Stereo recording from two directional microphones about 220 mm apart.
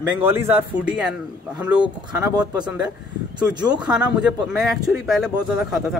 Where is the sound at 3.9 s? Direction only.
5° right (ahead or behind).